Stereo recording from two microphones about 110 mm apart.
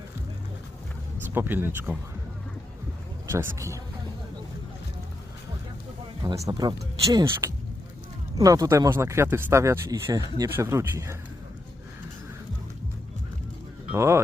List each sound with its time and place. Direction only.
1.3 s speech: 20° right (ahead or behind)
3.2 s speech: 25° right (ahead or behind)
6.3 s speech: 35° right (ahead or behind)
13.9 s speech: 25° right (ahead or behind)